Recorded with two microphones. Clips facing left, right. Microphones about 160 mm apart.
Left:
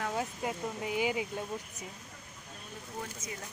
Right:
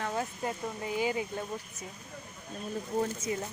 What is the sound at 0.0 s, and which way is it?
Speech, 10° left (ahead or behind).